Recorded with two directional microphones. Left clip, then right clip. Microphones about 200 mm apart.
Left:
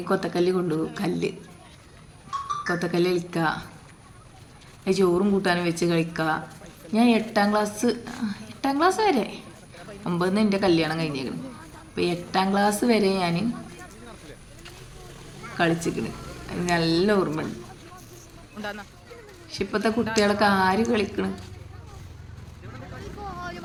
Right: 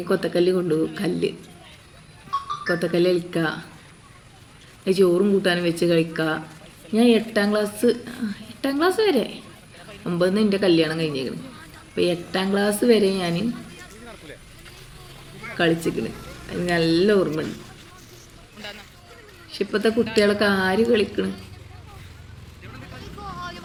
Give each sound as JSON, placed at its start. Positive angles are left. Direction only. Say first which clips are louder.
{"t": 0.0, "sound": "a woman's voice", "louder": "right 3 dB", "side_deg": 5}
{"t": 2.6, "sound": "a woman's voice", "louder": "right 5 dB", "side_deg": 5}
{"t": 4.9, "sound": "a woman's voice", "louder": "right 4 dB", "side_deg": 0}
{"t": 15.5, "sound": "a woman's voice", "louder": "right 3 dB", "side_deg": 5}
{"t": 19.5, "sound": "a woman's voice", "louder": "right 3 dB", "side_deg": 5}
{"t": 23.2, "sound": "vehicle", "louder": "right 1 dB", "side_deg": 45}